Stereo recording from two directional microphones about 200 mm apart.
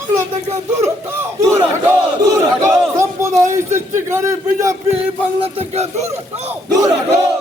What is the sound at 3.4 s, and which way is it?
A man's voice, 15° right (ahead or behind).